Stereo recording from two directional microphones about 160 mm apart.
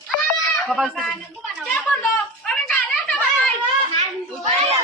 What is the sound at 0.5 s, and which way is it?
Speech, centre (ahead or behind).